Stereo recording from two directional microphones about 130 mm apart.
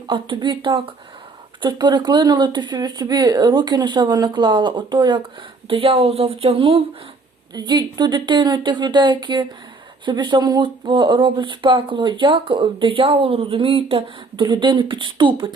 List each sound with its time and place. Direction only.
0.1 s speech: 40° right (ahead or behind)
7.5 s speech: 35° right (ahead or behind)